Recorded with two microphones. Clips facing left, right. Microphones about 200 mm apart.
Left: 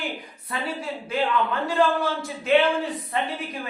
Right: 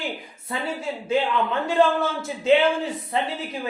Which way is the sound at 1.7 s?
25° right (ahead or behind).